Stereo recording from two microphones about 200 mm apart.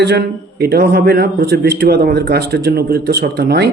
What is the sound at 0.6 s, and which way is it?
A man's voice, 55° right (ahead or behind).